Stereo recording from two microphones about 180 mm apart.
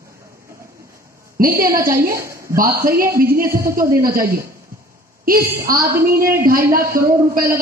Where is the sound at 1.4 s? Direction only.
55° right (ahead or behind).